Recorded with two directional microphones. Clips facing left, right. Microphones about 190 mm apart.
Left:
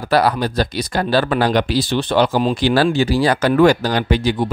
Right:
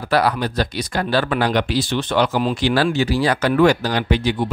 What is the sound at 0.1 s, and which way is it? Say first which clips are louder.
Speech: left 2 dB; 35° left (ahead or behind).